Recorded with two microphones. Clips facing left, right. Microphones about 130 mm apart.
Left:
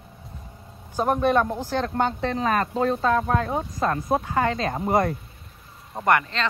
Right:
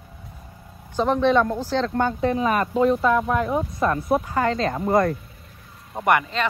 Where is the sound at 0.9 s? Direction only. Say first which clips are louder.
Right 2 dB; 10° left (ahead or behind).